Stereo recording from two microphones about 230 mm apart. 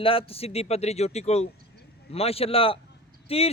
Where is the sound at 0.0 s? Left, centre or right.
Left.